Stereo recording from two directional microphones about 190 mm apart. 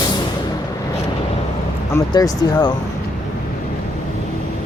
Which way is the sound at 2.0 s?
20° left (ahead or behind).